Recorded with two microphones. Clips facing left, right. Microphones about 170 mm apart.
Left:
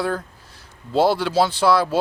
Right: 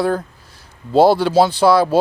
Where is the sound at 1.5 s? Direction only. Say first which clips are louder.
Right 4 dB; 10° right (ahead or behind).